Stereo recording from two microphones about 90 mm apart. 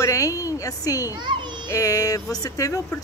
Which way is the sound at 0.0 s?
40° left (ahead or behind).